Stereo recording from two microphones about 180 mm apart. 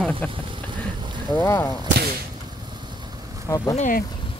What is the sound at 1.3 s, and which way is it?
Speech, 10° left (ahead or behind).